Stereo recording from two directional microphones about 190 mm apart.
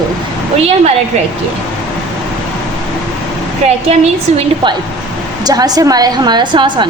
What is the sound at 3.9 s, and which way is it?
Speech, 30° right (ahead or behind).